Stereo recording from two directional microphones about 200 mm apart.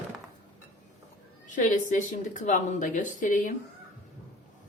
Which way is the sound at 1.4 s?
40° left (ahead or behind).